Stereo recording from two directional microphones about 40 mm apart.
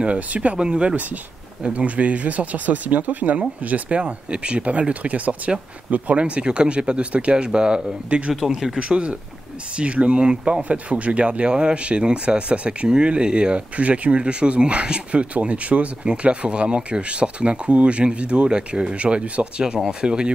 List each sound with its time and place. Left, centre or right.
0.0 s speech: right
0.6 s speech: right